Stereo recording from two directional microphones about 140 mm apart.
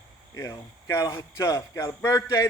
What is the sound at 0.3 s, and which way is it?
Speech, 20° left (ahead or behind).